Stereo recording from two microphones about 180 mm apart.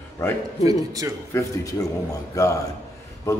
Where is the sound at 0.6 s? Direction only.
20° right (ahead or behind).